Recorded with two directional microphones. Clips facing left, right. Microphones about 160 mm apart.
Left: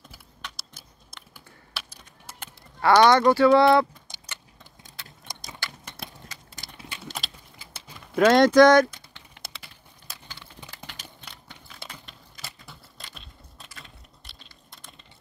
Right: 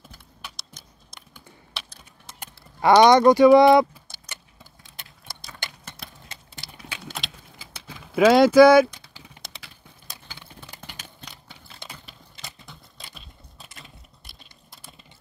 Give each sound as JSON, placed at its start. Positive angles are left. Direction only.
{"t": 0.4, "sound": "computer keyboard", "side_deg": -10}
{"t": 1.3, "sound": "typing", "side_deg": 10}
{"t": 2.4, "sound": "speech", "side_deg": -15}
{"t": 5.3, "sound": "clip-clop", "side_deg": 15}
{"t": 6.6, "sound": "typing", "side_deg": 50}
{"t": 7.2, "sound": "keys jangling", "side_deg": 0}
{"t": 7.5, "sound": "a sound", "side_deg": -90}
{"t": 8.1, "sound": "speech", "side_deg": -5}
{"t": 12.4, "sound": "a sound", "side_deg": 0}